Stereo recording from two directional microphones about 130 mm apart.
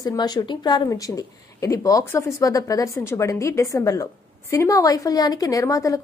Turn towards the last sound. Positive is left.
turn(degrees=25)  # may be behind; listen again after turning